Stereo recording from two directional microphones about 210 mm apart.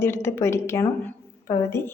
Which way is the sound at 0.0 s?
10° left (ahead or behind).